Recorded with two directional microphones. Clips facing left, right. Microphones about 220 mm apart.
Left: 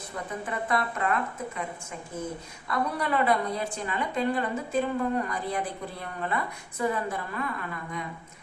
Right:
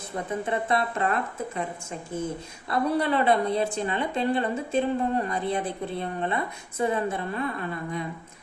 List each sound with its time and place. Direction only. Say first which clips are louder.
0.4 s a woman's voice: right 2 dB; 25° right (ahead or behind)
2.6 s a woman's voice: right 5 dB; 30° right (ahead or behind)